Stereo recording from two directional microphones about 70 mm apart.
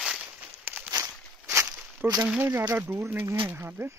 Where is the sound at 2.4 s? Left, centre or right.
Right.